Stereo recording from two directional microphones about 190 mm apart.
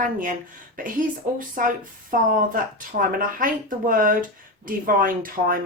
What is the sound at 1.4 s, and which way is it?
Speech, 45° right (ahead or behind).